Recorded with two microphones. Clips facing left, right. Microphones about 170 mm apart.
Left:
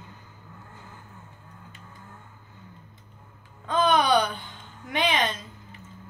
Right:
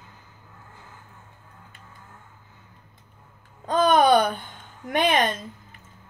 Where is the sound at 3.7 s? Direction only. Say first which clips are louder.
Right 4 dB; 45° right (ahead or behind).